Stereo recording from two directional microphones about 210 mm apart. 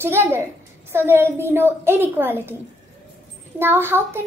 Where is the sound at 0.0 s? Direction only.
10° right (ahead or behind).